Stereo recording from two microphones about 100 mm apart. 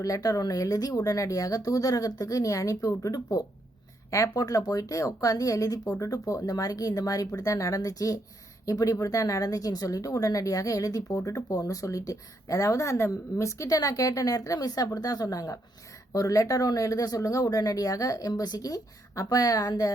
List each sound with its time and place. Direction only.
0.0 s a woman's voice: 35° left (ahead or behind)